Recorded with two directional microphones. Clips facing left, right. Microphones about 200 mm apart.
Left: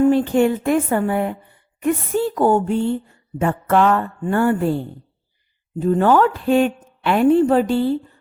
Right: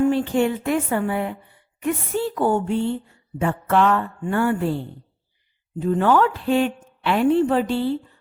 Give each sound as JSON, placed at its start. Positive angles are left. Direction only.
{"t": 0.0, "sound": "a woman's voice", "side_deg": 45}
{"t": 5.8, "sound": "a woman's voice", "side_deg": 40}